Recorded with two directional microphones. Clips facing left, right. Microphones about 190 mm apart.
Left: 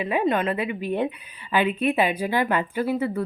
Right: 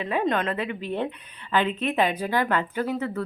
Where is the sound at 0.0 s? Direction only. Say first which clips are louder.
Left 2 dB; 10° left (ahead or behind).